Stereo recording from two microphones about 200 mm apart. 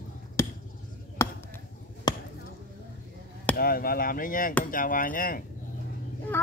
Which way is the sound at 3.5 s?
50° left (ahead or behind).